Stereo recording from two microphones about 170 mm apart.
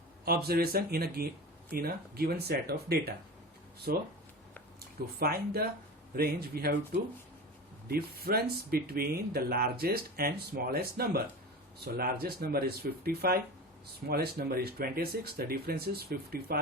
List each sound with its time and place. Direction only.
0.3 s speech: 65° right (ahead or behind)
5.2 s speech: 60° right (ahead or behind)
7.9 s speech: 65° right (ahead or behind)
12.2 s speech: 65° right (ahead or behind)